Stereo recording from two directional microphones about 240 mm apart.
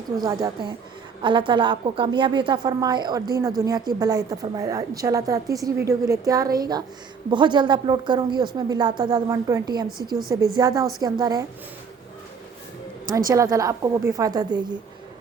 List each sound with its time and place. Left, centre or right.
0.3 s a woman's voice: centre
13.3 s a woman's voice: centre